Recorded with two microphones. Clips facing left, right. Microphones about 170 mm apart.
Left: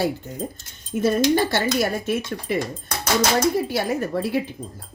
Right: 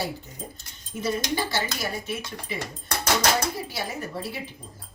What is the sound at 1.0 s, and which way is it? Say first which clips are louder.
Speech: left 9 dB; 55° left (ahead or behind).